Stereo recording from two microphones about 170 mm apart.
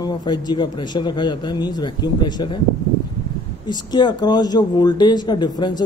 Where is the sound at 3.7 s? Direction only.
25° left (ahead or behind).